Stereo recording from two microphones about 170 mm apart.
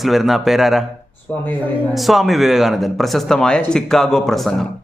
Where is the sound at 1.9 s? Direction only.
Centre (ahead or behind).